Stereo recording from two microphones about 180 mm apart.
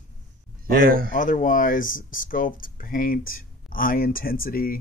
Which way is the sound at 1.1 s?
50° left (ahead or behind).